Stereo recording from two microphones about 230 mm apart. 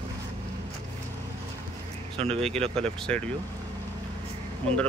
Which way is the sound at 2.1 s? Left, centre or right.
Right.